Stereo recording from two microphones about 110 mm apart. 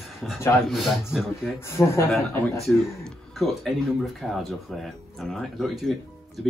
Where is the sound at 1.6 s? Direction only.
25° left (ahead or behind).